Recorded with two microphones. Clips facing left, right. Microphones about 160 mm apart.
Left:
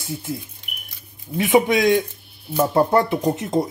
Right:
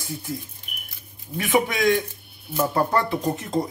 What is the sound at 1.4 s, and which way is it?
Speech, 20° left (ahead or behind).